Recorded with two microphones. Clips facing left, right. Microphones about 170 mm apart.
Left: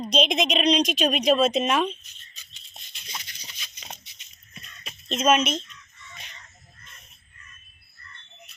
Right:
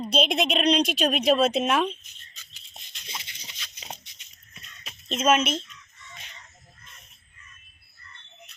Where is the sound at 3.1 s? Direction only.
25° right (ahead or behind).